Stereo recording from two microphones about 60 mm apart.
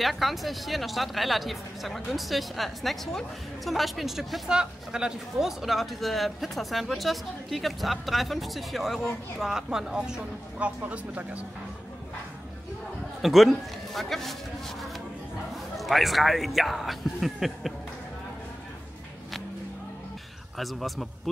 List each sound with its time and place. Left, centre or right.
0.0 s a woman's voice: centre
10.9 s speech: right
13.2 s a man's voice: centre
15.5 s a man's voice: centre
20.5 s a woman's voice: centre